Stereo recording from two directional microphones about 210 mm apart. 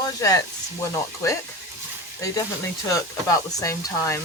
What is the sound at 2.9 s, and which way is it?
Speech, 15° left (ahead or behind).